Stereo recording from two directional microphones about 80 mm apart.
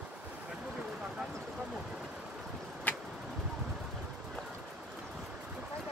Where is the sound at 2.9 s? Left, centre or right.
Left.